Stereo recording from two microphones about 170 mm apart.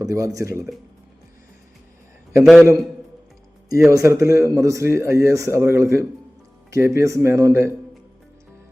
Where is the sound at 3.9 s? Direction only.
20° right (ahead or behind).